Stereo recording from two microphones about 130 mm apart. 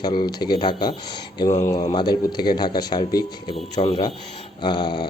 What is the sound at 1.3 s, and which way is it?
Speech, 25° left (ahead or behind).